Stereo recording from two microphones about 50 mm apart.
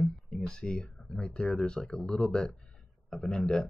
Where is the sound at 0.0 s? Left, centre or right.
Centre.